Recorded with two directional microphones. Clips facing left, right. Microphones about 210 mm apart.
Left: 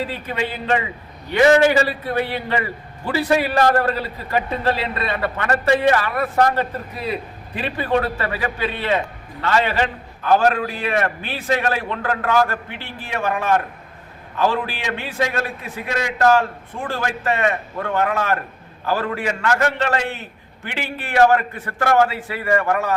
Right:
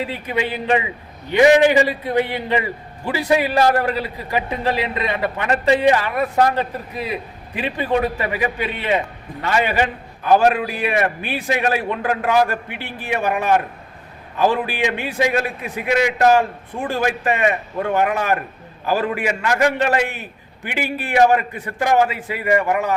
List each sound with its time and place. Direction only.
0.0 s a man's voice: 15° right (ahead or behind)